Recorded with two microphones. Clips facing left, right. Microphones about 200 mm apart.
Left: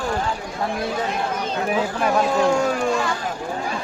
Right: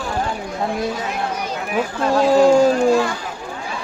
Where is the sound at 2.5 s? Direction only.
35° right (ahead or behind).